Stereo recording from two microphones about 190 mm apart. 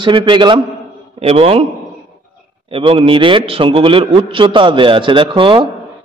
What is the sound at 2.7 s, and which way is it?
A man's voice, 30° right (ahead or behind).